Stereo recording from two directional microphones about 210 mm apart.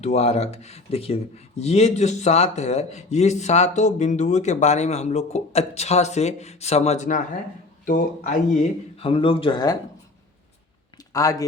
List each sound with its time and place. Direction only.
0.0 s speech: 30° left (ahead or behind)
9.0 s speech: 25° left (ahead or behind)
10.9 s a sound: 15° left (ahead or behind)